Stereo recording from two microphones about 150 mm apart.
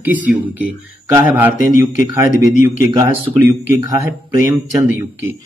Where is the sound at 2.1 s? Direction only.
20° right (ahead or behind).